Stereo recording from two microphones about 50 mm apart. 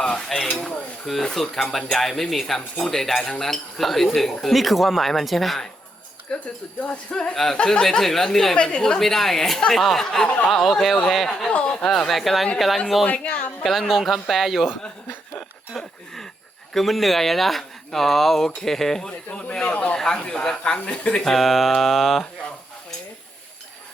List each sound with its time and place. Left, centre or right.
0.0 s dishes: centre
1.2 s speech: centre
6.8 s speech: left
7.7 s speech: centre
10.2 s speech: left
10.5 s speech: centre
11.4 s speech: left
12.0 s speech: centre
13.1 s speech: left
13.7 s speech: centre
15.7 s a sound: centre
16.7 s speech: centre
19.3 s speech: left
21.2 s speech: centre